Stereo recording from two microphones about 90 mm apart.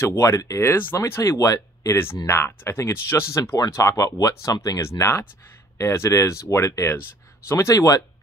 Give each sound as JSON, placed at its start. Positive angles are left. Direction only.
{"t": 0.0, "sound": "speech", "side_deg": 35}
{"t": 2.2, "sound": "speech", "side_deg": 30}
{"t": 3.5, "sound": "speech", "side_deg": 40}